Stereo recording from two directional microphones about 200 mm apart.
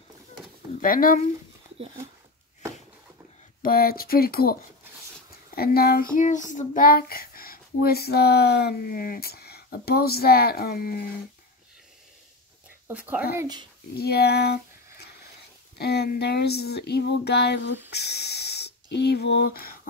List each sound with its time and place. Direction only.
0.7 s a child's voice: 45° left (ahead or behind)
3.6 s a child's voice: 50° left (ahead or behind)
6.1 s a child's voice: 40° left (ahead or behind)
12.8 s speech: 10° right (ahead or behind)
13.4 s speech: 20° right (ahead or behind)
13.9 s speech: 50° left (ahead or behind)
15.8 s a sound: 55° left (ahead or behind)
17.9 s speech: 55° left (ahead or behind)